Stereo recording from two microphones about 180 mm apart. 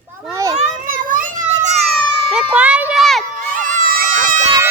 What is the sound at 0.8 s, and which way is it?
Children playing, 50° right (ahead or behind).